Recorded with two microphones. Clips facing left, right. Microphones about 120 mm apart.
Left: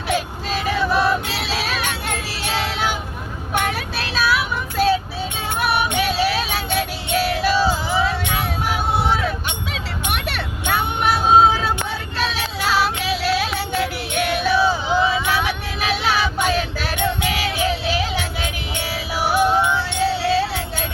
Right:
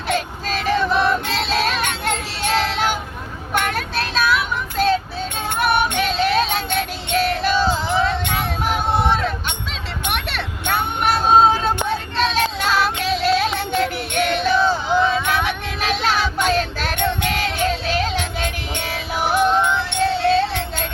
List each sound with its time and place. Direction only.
0.1 s music: 5° left (ahead or behind)
3.7 s child singing: 5° left (ahead or behind)
5.5 s music: centre (ahead or behind)
8.7 s vehicle: 5° left (ahead or behind)
11.3 s music: 5° left (ahead or behind)
13.7 s a sound: 5° left (ahead or behind)
15.9 s child singing: 5° left (ahead or behind)
17.0 s music: 5° left (ahead or behind)